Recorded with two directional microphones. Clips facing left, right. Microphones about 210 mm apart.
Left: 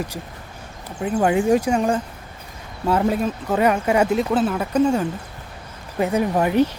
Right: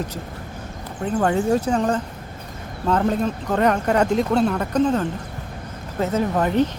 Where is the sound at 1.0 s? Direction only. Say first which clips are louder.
Left 2 dB; 10° left (ahead or behind).